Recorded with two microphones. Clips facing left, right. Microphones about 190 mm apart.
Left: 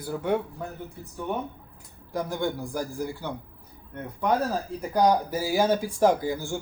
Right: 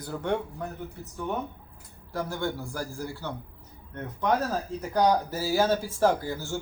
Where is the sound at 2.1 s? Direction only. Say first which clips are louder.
Left 2 dB; 15° left (ahead or behind).